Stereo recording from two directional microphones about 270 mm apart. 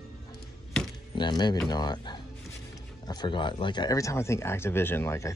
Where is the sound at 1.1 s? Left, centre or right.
Centre.